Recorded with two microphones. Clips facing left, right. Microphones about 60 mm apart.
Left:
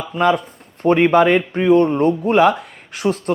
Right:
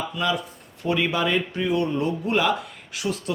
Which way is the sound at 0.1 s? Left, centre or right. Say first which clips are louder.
Left 9 dB; left.